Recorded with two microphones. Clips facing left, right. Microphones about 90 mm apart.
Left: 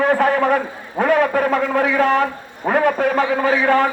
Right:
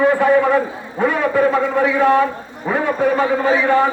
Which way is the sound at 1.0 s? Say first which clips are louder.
Even; 65° left (ahead or behind).